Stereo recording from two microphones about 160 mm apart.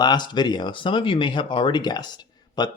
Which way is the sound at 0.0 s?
25° left (ahead or behind).